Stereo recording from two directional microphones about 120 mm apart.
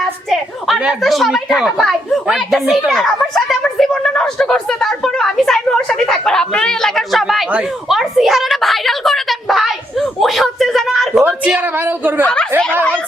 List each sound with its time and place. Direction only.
0.0 s a woman's voice: centre (ahead or behind)
11.2 s a woman's voice: 15° right (ahead or behind)
12.2 s speech: 10° left (ahead or behind)